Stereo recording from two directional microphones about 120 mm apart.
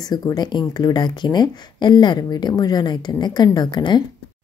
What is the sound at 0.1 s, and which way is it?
A woman's voice, 35° left (ahead or behind).